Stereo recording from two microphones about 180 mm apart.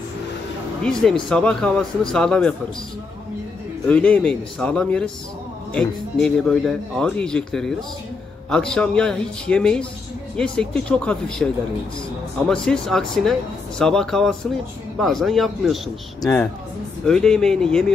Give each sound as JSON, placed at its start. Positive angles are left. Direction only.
{"t": 0.8, "sound": "speech", "side_deg": 5}
{"t": 3.8, "sound": "speech", "side_deg": 5}
{"t": 16.2, "sound": "speech", "side_deg": 10}